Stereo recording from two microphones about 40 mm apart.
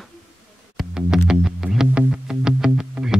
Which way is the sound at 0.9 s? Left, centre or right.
Centre.